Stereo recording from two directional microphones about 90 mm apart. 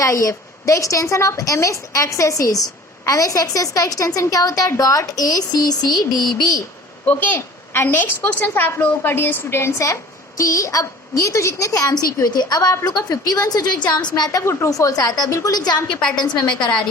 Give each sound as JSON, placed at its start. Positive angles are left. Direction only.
{"t": 0.0, "sound": "a woman's voice", "side_deg": 35}
{"t": 7.0, "sound": "a woman's voice", "side_deg": 15}
{"t": 14.4, "sound": "a woman's voice", "side_deg": 35}